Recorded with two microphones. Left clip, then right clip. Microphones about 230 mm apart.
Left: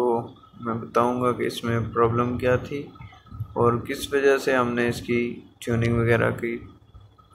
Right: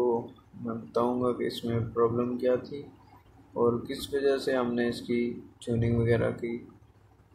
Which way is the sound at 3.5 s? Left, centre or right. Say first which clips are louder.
Left 5 dB; left.